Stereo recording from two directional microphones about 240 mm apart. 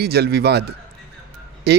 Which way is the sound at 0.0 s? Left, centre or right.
Right.